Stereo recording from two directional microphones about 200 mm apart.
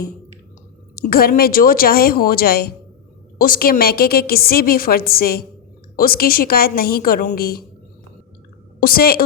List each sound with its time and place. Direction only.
0.9 s a woman's voice: 50° left (ahead or behind)
8.8 s a woman's voice: 50° left (ahead or behind)